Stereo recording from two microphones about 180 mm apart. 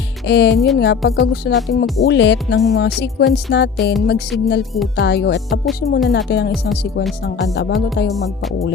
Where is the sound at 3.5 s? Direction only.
70° left (ahead or behind).